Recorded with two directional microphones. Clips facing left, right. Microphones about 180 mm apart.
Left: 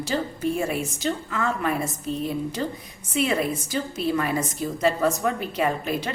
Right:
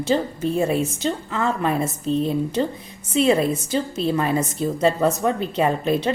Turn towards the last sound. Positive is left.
turn(degrees=-25)  # may be behind; listen again after turning